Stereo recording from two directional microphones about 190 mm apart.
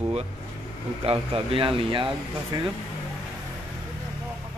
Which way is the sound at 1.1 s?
30° right (ahead or behind).